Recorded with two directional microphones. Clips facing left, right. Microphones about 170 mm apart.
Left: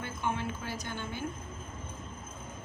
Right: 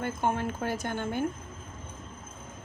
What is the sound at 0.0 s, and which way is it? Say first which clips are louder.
A woman's voice: right 5 dB; 50° right (ahead or behind).